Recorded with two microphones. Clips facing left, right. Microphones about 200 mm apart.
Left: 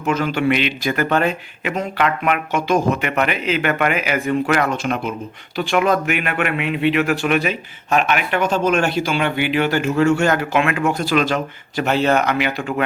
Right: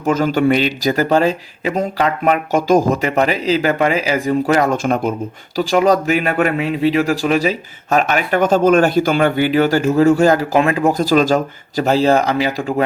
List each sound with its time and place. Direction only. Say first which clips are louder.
0.0 s a man's voice: right 4 dB; 45° right (ahead or behind)
4.7 s a man's voice: right 5 dB; 45° right (ahead or behind)